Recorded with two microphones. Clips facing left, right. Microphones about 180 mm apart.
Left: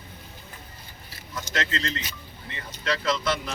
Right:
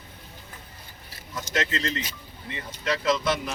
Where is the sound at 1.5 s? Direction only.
15° right (ahead or behind).